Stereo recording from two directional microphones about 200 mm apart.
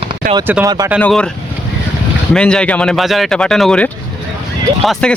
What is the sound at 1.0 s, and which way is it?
Speech, 5° left (ahead or behind).